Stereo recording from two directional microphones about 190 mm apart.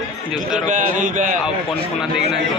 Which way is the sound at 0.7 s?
40° right (ahead or behind).